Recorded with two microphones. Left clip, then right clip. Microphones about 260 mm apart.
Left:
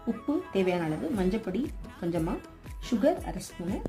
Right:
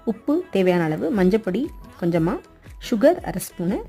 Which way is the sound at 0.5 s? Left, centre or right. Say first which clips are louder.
Right 8 dB; right.